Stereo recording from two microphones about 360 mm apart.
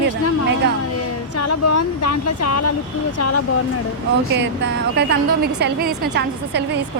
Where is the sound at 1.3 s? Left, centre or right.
Left.